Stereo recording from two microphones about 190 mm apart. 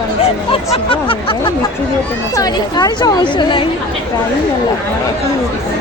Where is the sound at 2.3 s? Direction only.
20° left (ahead or behind).